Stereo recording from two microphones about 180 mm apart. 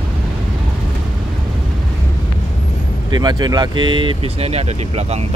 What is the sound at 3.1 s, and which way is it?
Speech, 25° right (ahead or behind).